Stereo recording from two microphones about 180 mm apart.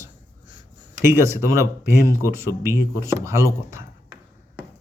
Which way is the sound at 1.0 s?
15° right (ahead or behind).